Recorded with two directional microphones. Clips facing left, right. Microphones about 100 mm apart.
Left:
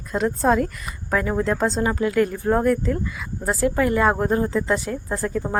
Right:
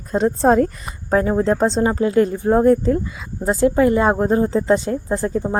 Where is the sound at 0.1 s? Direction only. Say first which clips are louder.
Right 4 dB; 35° right (ahead or behind).